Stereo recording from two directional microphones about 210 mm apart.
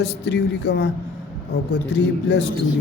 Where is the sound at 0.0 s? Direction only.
55° left (ahead or behind).